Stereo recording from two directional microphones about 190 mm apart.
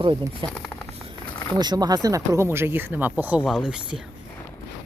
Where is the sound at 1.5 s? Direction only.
20° right (ahead or behind); by 4.0 s 5° right (ahead or behind).